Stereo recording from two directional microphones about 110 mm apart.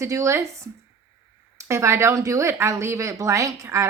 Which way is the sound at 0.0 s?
30° right (ahead or behind).